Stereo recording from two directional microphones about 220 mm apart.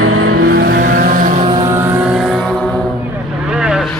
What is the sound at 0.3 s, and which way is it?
Vehicle, 45° right (ahead or behind).